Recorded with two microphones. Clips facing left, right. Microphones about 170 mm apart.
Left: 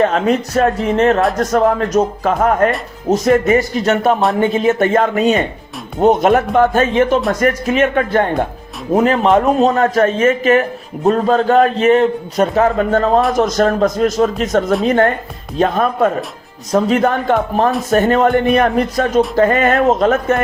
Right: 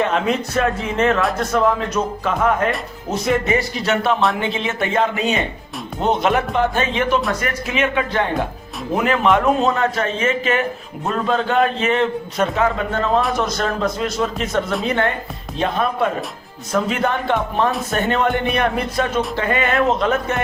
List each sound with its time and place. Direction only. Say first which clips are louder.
0.0 s a man's voice: left 5 dB; 40° left (ahead or behind)
9.0 s a man's voice: left 5 dB; 35° left (ahead or behind)